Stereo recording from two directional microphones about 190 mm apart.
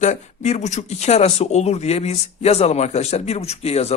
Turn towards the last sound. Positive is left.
turn(degrees=35)  # may be behind; listen again after turning